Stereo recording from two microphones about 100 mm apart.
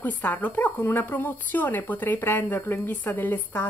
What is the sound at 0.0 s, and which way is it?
Speech, 15° left (ahead or behind).